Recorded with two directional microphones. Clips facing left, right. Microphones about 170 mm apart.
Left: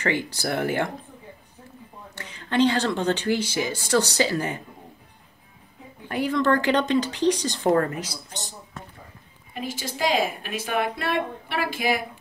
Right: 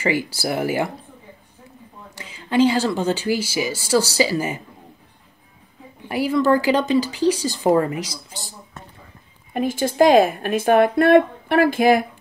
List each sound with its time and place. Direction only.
0.0 s speech: 10° right (ahead or behind)
2.1 s speech: 10° right (ahead or behind)
6.0 s speech: 5° right (ahead or behind)
9.5 s a woman's voice: 50° right (ahead or behind)